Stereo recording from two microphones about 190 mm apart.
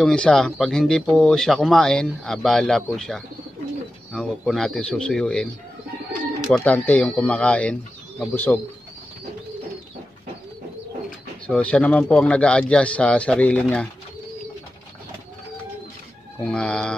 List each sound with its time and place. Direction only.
0.0 s speech: 5° left (ahead or behind)
6.5 s speech: 5° left (ahead or behind)
11.4 s speech: 5° left (ahead or behind)
16.3 s speech: 5° left (ahead or behind)